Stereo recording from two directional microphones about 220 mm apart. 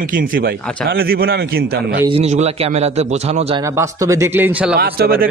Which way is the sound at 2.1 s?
30° right (ahead or behind).